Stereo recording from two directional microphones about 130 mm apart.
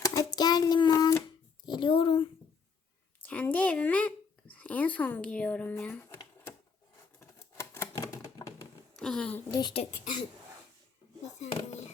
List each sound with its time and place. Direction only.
0.0 s child singing: 30° left (ahead or behind)
1.6 s a sound: 35° left (ahead or behind)
3.2 s speech: 10° left (ahead or behind)
7.2 s typewriter: 20° left (ahead or behind)
9.0 s a child's voice: 5° left (ahead or behind)
9.5 s speech: 35° left (ahead or behind)
9.9 s speech: 85° left